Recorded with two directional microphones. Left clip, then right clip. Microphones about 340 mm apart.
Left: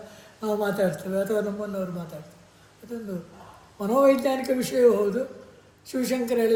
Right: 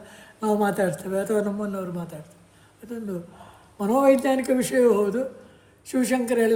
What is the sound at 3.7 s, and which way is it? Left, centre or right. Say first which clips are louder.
A man's voice: right 1 dB; right.